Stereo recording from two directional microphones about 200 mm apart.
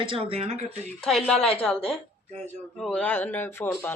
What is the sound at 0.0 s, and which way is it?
Speech, 25° right (ahead or behind).